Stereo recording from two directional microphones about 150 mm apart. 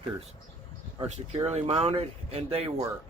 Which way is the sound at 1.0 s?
45° right (ahead or behind).